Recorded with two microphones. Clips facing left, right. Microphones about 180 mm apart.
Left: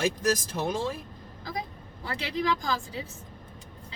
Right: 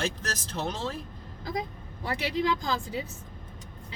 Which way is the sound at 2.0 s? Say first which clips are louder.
Right 1 dB; 25° right (ahead or behind).